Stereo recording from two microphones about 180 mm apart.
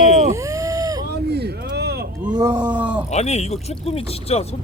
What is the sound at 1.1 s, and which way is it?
Vehicle, 65° right (ahead or behind).